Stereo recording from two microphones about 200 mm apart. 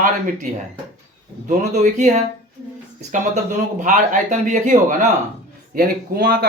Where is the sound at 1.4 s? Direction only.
35° right (ahead or behind).